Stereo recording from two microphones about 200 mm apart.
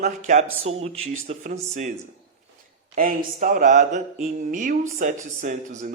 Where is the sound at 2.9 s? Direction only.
40° right (ahead or behind).